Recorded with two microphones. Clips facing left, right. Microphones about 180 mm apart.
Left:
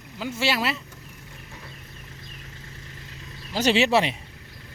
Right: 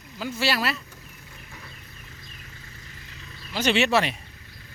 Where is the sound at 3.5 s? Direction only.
40° left (ahead or behind).